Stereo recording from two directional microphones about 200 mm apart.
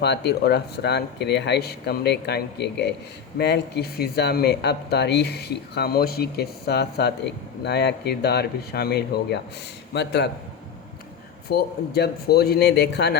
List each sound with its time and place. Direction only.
0.0 s speech: 55° left (ahead or behind)
11.4 s speech: 50° left (ahead or behind)